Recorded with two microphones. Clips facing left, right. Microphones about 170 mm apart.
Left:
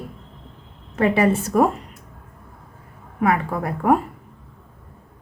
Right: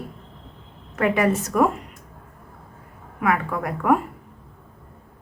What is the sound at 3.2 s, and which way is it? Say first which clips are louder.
Speech: left 2 dB; 30° left (ahead or behind).